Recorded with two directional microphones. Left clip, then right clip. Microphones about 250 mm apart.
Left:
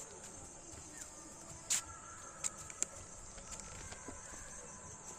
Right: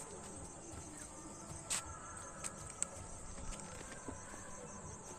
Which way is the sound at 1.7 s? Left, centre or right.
Left.